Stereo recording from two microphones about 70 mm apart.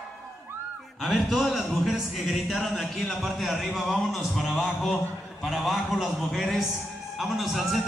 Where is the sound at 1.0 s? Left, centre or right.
Centre.